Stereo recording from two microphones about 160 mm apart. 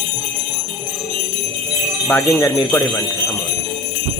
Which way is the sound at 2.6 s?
20° left (ahead or behind).